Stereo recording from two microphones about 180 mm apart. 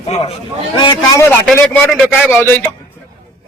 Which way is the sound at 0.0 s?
35° left (ahead or behind).